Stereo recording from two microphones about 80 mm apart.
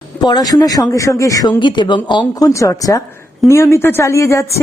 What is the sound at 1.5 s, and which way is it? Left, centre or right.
Speech, left.